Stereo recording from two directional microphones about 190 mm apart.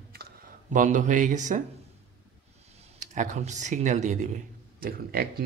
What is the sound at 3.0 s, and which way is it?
A man's voice, 40° right (ahead or behind).